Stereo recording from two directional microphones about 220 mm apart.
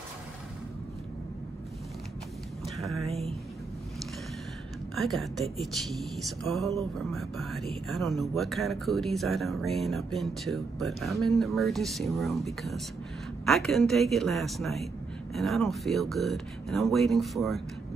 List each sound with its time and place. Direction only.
3.1 s speech: 30° right (ahead or behind)
4.9 s speech: centre (ahead or behind)